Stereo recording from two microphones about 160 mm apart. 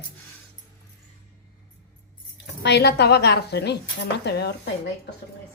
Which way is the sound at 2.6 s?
90° left.